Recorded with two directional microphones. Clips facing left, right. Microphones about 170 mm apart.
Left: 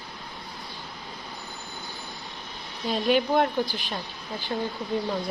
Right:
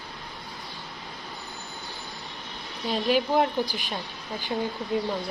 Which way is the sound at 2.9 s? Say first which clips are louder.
Left 1 dB; centre (ahead or behind).